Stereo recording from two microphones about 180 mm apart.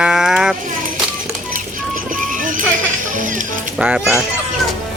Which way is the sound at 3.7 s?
5° right (ahead or behind).